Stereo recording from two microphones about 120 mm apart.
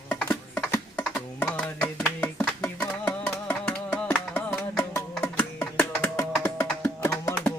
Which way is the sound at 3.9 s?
15° left (ahead or behind).